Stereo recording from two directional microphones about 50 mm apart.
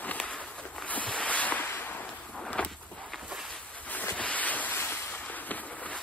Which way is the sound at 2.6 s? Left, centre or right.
Left.